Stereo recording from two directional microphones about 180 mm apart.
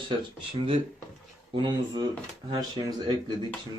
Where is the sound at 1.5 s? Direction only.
25° right (ahead or behind).